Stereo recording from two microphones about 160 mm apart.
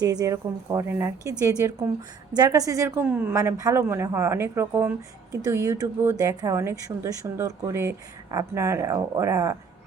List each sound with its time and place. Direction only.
0.0 s a woman's voice: 25° right (ahead or behind)